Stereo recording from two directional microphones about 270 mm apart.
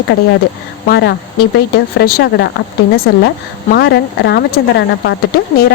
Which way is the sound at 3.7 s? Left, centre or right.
Left.